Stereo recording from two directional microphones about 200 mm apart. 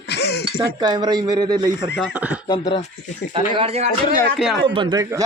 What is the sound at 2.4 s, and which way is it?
Speech, 25° left (ahead or behind).